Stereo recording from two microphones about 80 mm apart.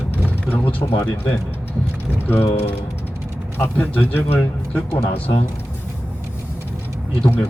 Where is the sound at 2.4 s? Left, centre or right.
Left.